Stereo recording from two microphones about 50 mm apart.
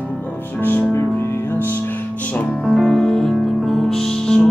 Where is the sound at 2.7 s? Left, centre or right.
Centre.